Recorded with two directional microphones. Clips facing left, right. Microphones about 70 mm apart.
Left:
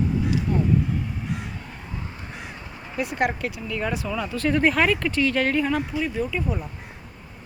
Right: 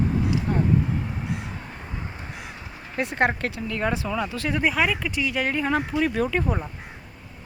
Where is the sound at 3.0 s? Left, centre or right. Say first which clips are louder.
Right 1 dB; right.